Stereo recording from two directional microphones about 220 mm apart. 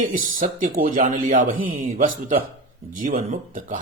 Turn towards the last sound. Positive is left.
turn(degrees=-35)  # may be behind; listen again after turning